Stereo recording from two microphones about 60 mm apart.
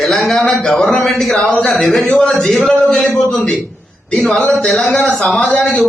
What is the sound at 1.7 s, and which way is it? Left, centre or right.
A man's voice, centre.